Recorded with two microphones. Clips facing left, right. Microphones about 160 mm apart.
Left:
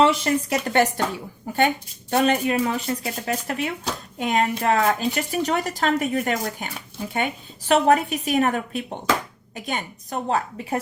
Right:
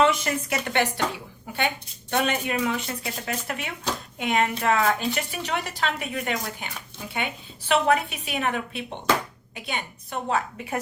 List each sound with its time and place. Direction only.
0.0 s a woman's voice: 30° left (ahead or behind)